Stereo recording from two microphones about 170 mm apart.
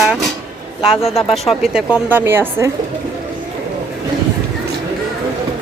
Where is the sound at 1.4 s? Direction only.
5° right (ahead or behind).